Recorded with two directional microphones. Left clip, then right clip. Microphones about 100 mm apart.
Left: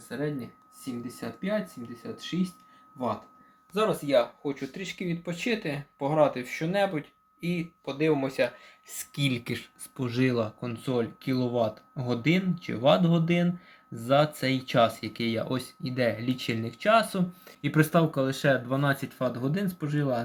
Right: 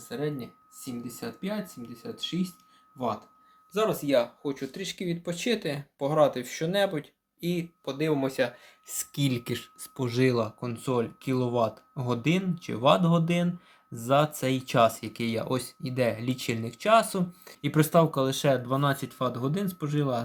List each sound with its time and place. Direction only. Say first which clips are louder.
0.1 s speech: even; 20° right (ahead or behind)
3.7 s speech: even; 25° right (ahead or behind)
7.4 s speech: right 1 dB; 35° right (ahead or behind)